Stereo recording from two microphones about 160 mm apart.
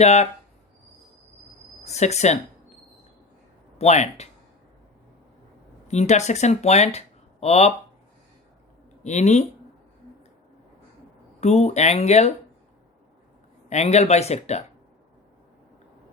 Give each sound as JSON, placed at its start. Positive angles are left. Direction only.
{"t": 0.0, "sound": "speech", "side_deg": 45}
{"t": 1.8, "sound": "speech", "side_deg": 45}
{"t": 3.8, "sound": "speech", "side_deg": 45}
{"t": 5.9, "sound": "speech", "side_deg": 45}
{"t": 9.0, "sound": "speech", "side_deg": 45}
{"t": 11.3, "sound": "speech", "side_deg": 45}
{"t": 13.7, "sound": "speech", "side_deg": 45}